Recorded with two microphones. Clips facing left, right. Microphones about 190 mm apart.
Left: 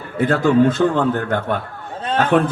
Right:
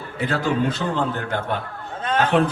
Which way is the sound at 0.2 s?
50° left (ahead or behind).